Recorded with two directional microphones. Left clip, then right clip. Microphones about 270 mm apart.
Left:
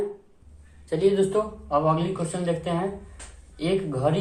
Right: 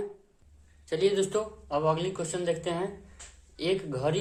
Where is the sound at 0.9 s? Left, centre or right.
Right.